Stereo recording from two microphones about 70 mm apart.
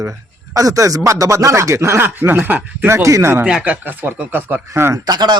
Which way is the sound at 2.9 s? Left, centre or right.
Right.